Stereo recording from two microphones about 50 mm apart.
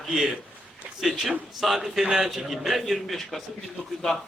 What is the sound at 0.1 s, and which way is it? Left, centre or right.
A man's voice, centre.